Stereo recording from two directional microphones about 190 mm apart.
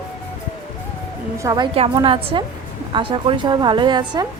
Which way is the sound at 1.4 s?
20° right (ahead or behind).